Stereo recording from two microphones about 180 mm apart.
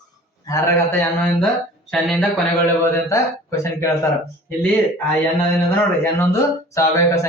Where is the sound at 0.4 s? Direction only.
20° left (ahead or behind).